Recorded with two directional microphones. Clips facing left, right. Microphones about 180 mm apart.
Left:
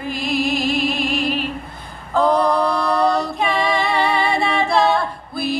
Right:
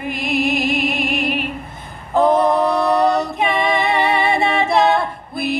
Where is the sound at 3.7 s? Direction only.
20° right (ahead or behind).